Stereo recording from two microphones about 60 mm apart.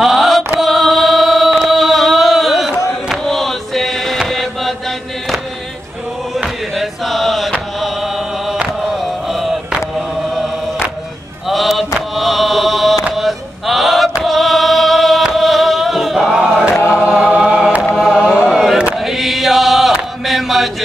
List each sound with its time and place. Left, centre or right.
0.0 s music: centre
0.6 s chant: centre
6.7 s chant: centre
8.9 s a sound: centre
9.9 s chant: centre
11.4 s mantra: centre
13.1 s chant: centre
14.2 s a sound: centre
15.3 s chant: centre
16.7 s choir: left
17.0 s choir: centre
18.2 s chant: centre